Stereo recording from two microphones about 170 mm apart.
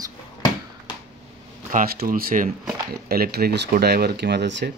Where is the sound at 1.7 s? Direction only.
55° right (ahead or behind); by 4.7 s 90° right.